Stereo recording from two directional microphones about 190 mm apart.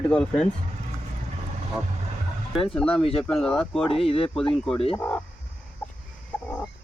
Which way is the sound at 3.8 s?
30° left (ahead or behind).